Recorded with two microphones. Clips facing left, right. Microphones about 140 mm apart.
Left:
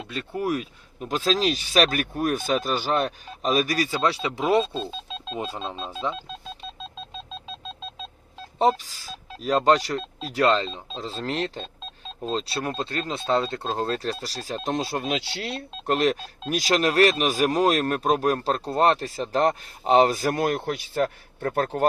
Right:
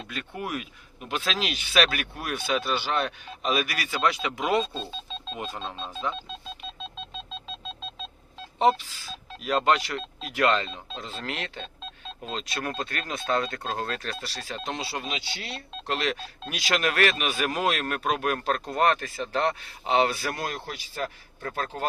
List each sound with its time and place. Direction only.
0.1 s speech: 35° left (ahead or behind)
8.5 s speech: 40° left (ahead or behind); by 21.7 s 55° left (ahead or behind)